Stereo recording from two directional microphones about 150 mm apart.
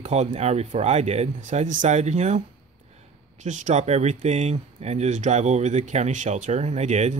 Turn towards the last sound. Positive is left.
turn(degrees=-50)  # may be behind; listen again after turning